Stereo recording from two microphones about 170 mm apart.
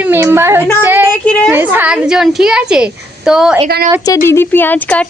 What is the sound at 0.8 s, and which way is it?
Child singing, 10° right (ahead or behind).